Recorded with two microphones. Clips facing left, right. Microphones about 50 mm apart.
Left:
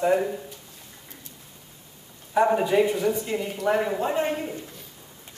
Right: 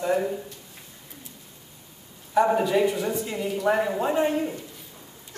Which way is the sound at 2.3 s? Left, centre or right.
Centre.